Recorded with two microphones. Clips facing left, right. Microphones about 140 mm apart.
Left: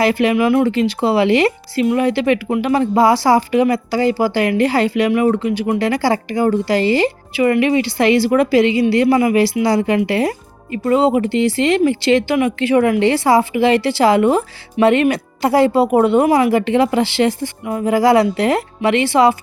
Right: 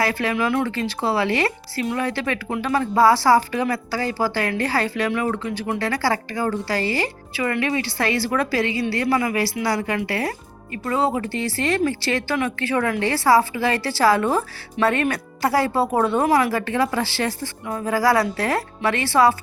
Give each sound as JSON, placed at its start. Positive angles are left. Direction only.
{"t": 0.0, "sound": "speech", "side_deg": 20}